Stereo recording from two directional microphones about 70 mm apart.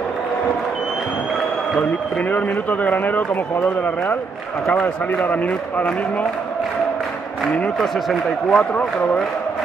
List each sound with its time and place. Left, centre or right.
2.3 s a man's voice: left
7.8 s speech: centre